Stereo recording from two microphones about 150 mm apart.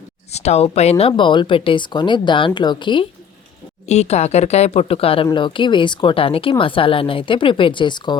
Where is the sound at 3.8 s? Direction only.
45° left (ahead or behind).